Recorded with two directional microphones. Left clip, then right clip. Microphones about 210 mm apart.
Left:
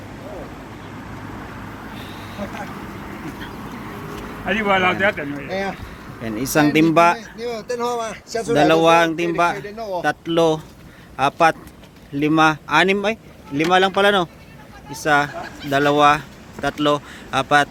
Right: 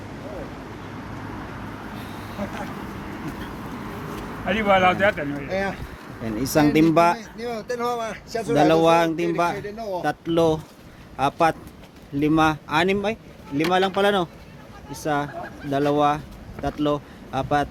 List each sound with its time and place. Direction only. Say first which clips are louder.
4.4 s speech: left 1 dB; 60° right (ahead or behind)
5.5 s speech: left 1 dB; 45° left (ahead or behind)
6.2 s speech: left 2 dB; 5° right (ahead or behind)
7.2 s speech: left 3 dB; 45° left (ahead or behind)
8.5 s speech: left 3 dB; 5° right (ahead or behind)
9.6 s a man's voice: left 3 dB; 25° left (ahead or behind)
10.0 s speech: left 3 dB; 5° right (ahead or behind)